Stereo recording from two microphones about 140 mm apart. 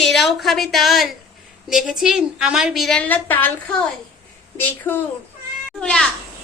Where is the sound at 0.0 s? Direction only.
Centre (ahead or behind).